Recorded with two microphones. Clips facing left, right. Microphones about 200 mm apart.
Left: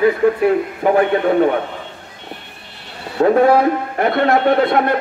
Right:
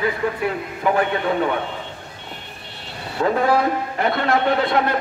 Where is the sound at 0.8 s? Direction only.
45° left (ahead or behind).